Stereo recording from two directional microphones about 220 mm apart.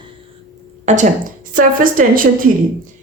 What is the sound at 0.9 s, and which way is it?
A woman's voice, 30° right (ahead or behind).